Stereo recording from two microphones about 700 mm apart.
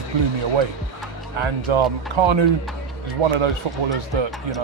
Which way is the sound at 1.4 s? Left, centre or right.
Right.